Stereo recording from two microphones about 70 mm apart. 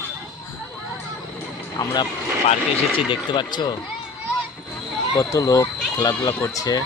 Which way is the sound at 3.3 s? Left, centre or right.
Left.